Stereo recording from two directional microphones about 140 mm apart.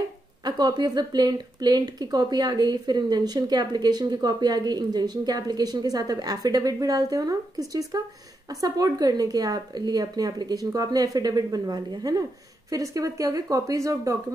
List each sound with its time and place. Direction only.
0.5 s a woman's voice: 30° right (ahead or behind)